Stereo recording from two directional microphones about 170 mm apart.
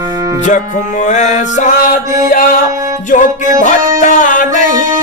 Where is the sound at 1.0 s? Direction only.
45° left (ahead or behind).